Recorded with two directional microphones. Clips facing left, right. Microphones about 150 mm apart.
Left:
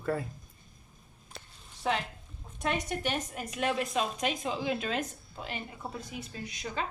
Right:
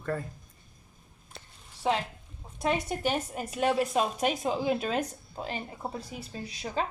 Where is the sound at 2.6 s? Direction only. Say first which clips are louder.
Right 3 dB; 35° right (ahead or behind).